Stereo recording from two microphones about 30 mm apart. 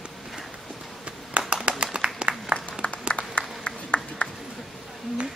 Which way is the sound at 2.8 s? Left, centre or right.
Left.